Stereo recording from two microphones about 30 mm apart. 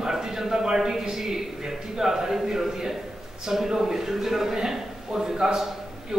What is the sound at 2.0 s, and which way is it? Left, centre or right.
A man's voice, centre.